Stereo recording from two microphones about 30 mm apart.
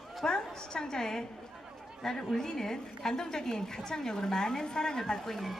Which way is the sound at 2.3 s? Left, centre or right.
Centre.